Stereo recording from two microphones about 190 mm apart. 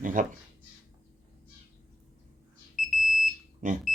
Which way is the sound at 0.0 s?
45° right (ahead or behind).